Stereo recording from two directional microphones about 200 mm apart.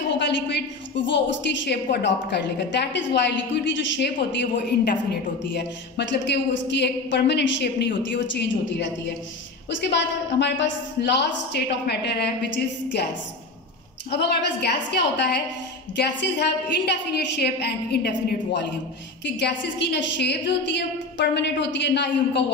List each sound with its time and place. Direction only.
0.1 s a woman's voice: 60° left (ahead or behind)
14.1 s a woman's voice: 60° left (ahead or behind)